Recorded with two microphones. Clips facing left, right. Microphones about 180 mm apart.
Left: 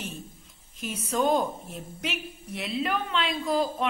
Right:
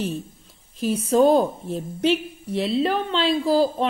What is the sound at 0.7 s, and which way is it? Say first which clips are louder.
A woman's voice: right 10 dB; 35° right (ahead or behind).